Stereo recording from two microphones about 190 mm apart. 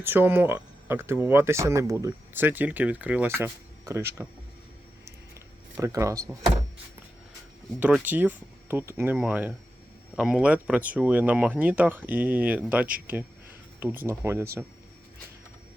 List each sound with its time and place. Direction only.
0.0 s speech: 10° right (ahead or behind)
5.7 s speech: 15° right (ahead or behind)
7.8 s speech: 5° right (ahead or behind)